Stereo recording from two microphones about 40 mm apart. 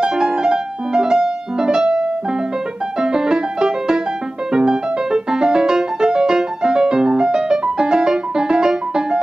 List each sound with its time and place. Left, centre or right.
0.0 s music: centre
3.0 s music: centre